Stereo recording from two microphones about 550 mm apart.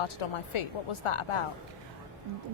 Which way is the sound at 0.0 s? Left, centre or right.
Left.